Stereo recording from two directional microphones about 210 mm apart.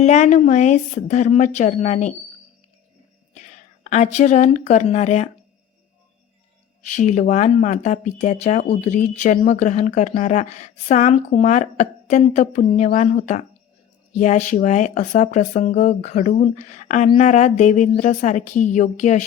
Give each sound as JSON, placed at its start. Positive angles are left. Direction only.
{"t": 0.0, "sound": "speech", "side_deg": 35}
{"t": 3.3, "sound": "speech", "side_deg": 35}
{"t": 6.9, "sound": "speech", "side_deg": 35}